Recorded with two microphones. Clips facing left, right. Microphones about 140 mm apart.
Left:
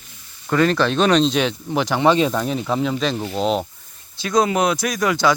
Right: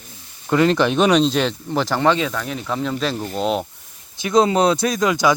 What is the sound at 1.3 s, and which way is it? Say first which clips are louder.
Speech: even; 5° left (ahead or behind).